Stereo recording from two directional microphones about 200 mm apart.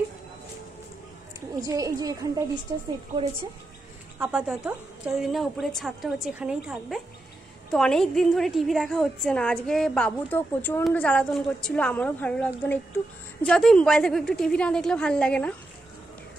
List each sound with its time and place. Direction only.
1.6 s a woman's voice: 15° right (ahead or behind)
4.2 s a woman's voice: 5° right (ahead or behind)